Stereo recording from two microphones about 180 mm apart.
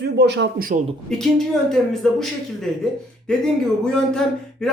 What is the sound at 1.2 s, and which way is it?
Speech, centre (ahead or behind).